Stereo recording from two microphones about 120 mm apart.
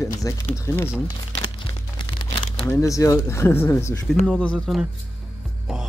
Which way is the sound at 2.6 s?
25° left (ahead or behind).